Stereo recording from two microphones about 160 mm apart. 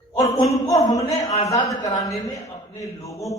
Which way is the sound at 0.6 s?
20° left (ahead or behind).